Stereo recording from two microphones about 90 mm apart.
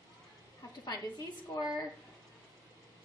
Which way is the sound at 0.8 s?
45° left (ahead or behind).